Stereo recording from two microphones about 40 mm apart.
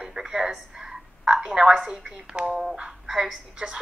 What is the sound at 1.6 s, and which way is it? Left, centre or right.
Speech, right.